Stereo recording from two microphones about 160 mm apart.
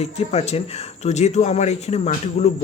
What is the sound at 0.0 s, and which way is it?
Speech, 40° left (ahead or behind).